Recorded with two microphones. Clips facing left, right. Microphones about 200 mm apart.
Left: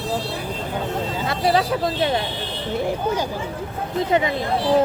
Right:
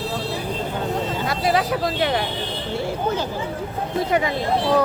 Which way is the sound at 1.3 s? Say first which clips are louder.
Left 2 dB; 30° left (ahead or behind).